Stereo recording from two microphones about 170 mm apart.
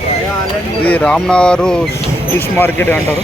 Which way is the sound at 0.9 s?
5° left (ahead or behind).